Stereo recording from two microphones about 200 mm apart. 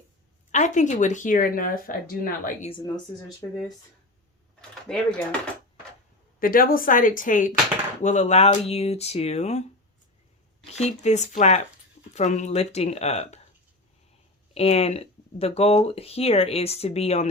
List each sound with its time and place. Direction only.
0.5 s speech: 35° left (ahead or behind)
2.6 s speech: 20° left (ahead or behind)
4.9 s speech: 5° left (ahead or behind)
6.4 s speech: 45° left (ahead or behind)
10.8 s speech: 35° left (ahead or behind)
14.5 s speech: 30° left (ahead or behind)